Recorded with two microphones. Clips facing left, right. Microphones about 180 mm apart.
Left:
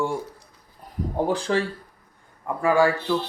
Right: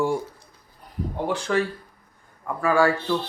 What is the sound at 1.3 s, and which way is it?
Speech, 30° left (ahead or behind).